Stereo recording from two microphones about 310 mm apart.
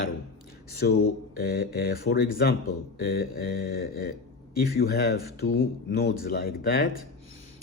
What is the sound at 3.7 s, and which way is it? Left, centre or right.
Speech, left.